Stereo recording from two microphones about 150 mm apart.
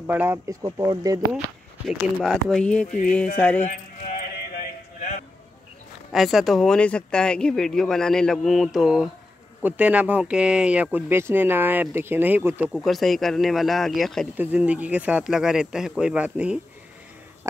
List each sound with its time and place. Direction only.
0.0 s speech: 15° right (ahead or behind)
1.9 s speech: centre (ahead or behind)
6.1 s speech: centre (ahead or behind)
12.7 s speech: centre (ahead or behind)
14.3 s speech: 10° right (ahead or behind)